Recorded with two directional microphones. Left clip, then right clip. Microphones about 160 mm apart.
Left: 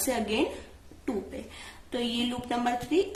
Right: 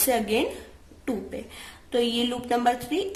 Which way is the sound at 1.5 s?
35° right (ahead or behind).